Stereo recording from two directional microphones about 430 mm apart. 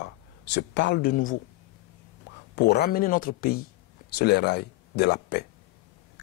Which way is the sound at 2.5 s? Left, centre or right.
Left.